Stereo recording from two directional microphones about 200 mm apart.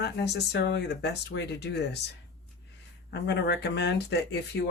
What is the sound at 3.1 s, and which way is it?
Speech, 55° left (ahead or behind).